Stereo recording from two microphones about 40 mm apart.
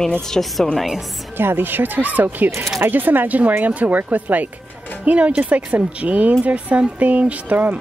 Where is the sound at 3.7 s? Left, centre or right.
Right.